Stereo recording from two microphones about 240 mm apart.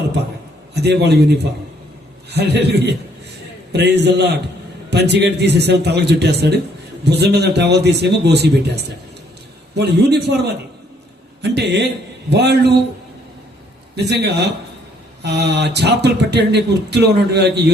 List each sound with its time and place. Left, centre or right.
0.7 s a man's voice: right
2.3 s speech: right
13.9 s speech: right